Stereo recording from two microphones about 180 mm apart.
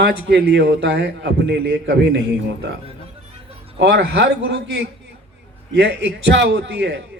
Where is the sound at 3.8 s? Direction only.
80° right.